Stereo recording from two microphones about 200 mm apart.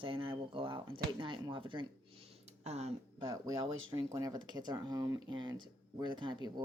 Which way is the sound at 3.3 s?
20° right (ahead or behind).